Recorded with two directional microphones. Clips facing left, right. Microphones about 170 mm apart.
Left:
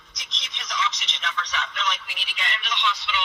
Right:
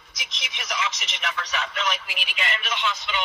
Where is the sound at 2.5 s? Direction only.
45° right (ahead or behind).